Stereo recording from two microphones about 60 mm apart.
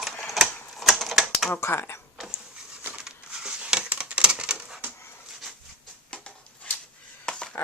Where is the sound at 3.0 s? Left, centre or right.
Centre.